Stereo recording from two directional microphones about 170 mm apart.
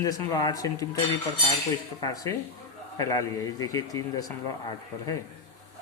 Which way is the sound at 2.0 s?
20° left (ahead or behind).